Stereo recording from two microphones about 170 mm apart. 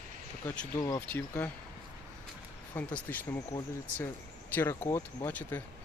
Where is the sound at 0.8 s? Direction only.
20° left (ahead or behind).